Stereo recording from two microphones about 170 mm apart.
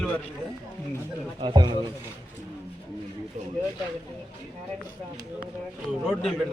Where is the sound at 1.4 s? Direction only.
25° right (ahead or behind).